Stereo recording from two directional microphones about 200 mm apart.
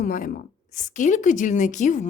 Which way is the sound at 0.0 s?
45° left (ahead or behind).